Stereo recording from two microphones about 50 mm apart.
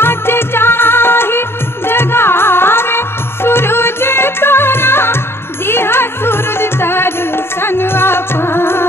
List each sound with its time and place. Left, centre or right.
0.0 s music: left